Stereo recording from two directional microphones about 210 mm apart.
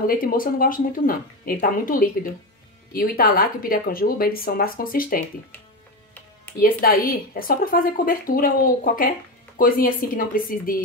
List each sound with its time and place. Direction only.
0.0 s speech: 45° left (ahead or behind)
6.6 s speech: 45° left (ahead or behind)